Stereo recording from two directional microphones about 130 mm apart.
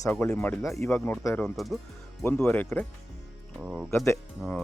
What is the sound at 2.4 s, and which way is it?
Speech, 15° left (ahead or behind).